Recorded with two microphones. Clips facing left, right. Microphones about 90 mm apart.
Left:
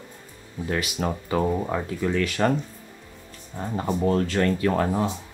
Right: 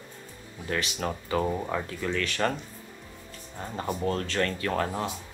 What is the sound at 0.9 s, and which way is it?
Speech, 35° left (ahead or behind).